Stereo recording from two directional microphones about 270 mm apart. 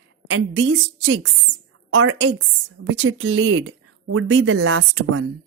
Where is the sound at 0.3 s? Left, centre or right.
Right.